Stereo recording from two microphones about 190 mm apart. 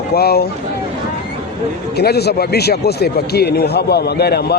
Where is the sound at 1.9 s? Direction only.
55° left (ahead or behind).